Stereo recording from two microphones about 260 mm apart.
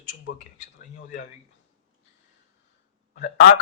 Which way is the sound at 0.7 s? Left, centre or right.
Left.